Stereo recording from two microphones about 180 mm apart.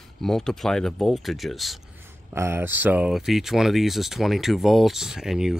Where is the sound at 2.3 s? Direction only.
15° right (ahead or behind).